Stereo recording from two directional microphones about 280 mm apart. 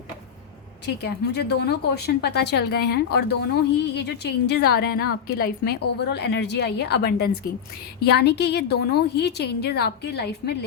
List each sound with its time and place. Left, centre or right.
1.0 s speech: left